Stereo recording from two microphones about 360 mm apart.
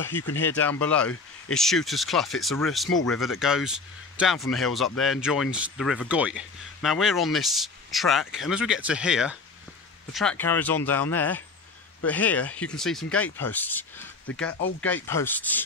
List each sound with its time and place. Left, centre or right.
0.4 s speech: centre